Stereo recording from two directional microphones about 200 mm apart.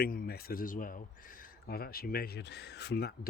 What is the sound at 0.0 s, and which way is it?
Speech, 50° left (ahead or behind).